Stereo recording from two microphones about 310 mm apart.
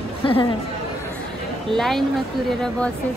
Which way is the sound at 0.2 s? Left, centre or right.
Centre.